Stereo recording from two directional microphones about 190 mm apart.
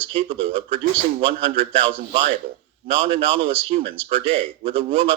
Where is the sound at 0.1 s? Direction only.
30° right (ahead or behind).